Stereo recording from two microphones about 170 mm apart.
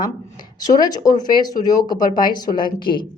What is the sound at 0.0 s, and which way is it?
Speech, 25° left (ahead or behind).